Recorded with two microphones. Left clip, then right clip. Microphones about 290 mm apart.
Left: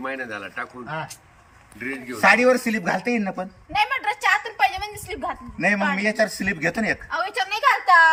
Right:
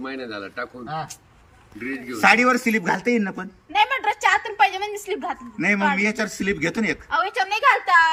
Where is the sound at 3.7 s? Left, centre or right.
Centre.